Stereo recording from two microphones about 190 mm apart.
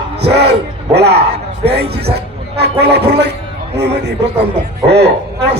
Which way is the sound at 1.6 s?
60° right (ahead or behind).